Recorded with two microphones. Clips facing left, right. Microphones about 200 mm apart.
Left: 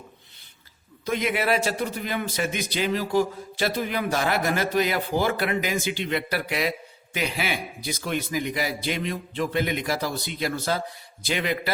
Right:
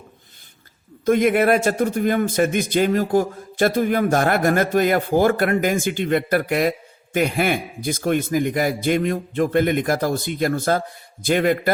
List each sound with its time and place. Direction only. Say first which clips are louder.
1.0 s speech: right 9 dB; 50° right (ahead or behind)